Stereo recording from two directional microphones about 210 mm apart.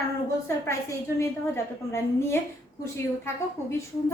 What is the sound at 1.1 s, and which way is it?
A woman's voice, 10° left (ahead or behind).